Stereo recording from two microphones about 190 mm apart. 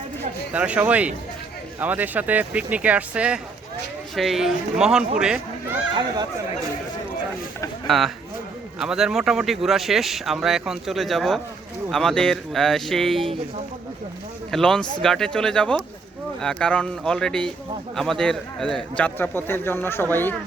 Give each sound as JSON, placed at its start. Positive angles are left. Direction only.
{"t": 0.5, "sound": "speech", "side_deg": -5}
{"t": 5.9, "sound": "speech", "side_deg": -25}
{"t": 7.9, "sound": "speech", "side_deg": 0}
{"t": 14.5, "sound": "a man's voice", "side_deg": 5}